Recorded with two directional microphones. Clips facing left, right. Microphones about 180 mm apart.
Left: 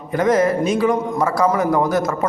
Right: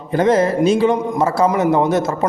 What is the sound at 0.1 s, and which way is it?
A man's voice, 30° right (ahead or behind).